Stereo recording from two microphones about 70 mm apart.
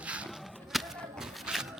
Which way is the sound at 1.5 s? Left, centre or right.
Centre.